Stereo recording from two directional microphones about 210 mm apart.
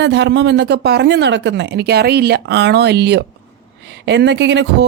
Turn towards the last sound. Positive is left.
turn(degrees=-55)  # may be behind; listen again after turning